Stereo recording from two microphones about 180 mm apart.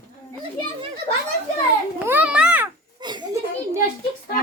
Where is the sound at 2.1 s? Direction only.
5° right (ahead or behind).